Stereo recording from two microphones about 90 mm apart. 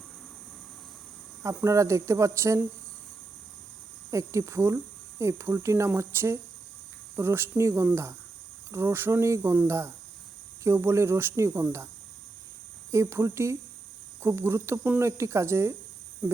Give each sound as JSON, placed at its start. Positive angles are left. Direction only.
{"t": 1.5, "sound": "speech", "side_deg": -35}
{"t": 4.1, "sound": "speech", "side_deg": -35}
{"t": 12.9, "sound": "speech", "side_deg": -30}